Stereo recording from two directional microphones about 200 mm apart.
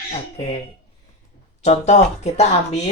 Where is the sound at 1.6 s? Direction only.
35° left (ahead or behind).